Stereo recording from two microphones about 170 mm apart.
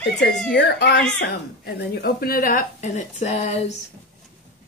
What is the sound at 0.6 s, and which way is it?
Speech, 85° left.